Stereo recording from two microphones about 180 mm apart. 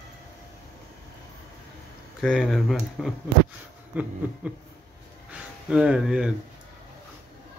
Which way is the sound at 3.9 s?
10° right (ahead or behind).